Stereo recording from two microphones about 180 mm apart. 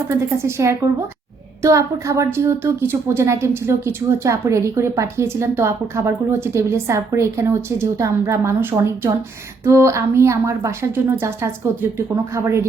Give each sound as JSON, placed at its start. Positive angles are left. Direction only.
{"t": 0.1, "sound": "a woman's voice", "side_deg": -15}